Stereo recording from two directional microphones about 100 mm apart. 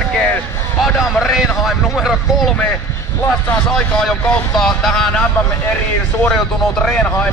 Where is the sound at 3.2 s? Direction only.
20° left (ahead or behind).